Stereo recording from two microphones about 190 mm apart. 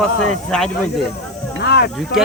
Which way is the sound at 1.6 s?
60° left (ahead or behind).